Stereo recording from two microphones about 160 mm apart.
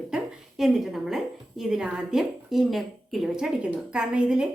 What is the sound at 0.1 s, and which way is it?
A woman's voice, centre (ahead or behind).